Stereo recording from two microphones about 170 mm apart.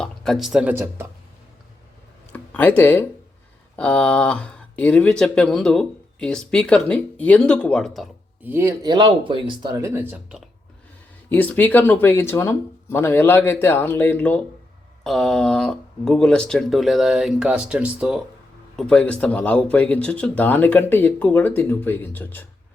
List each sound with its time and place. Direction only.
0.0 s speech: centre (ahead or behind)
2.3 s speech: 10° left (ahead or behind)
8.4 s speech: 15° right (ahead or behind)
11.3 s speech: 10° left (ahead or behind); by 18.2 s 5° right (ahead or behind)
18.8 s speech: 5° left (ahead or behind)